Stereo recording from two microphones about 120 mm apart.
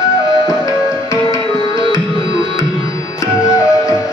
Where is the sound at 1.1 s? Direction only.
30° left (ahead or behind).